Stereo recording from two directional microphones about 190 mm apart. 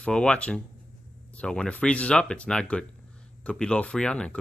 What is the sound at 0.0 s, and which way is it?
Speech, 5° left (ahead or behind).